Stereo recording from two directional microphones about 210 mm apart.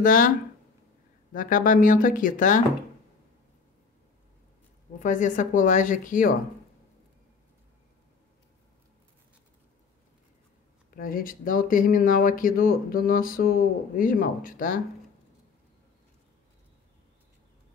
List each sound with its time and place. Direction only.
0.0 s speech: 40° left (ahead or behind)
1.3 s speech: 40° left (ahead or behind)
4.9 s speech: 35° left (ahead or behind)
11.0 s speech: 40° left (ahead or behind)